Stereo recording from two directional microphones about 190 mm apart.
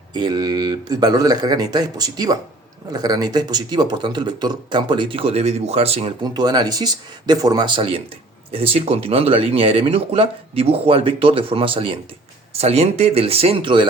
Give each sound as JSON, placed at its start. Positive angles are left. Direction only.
{"t": 0.1, "sound": "speech", "side_deg": -20}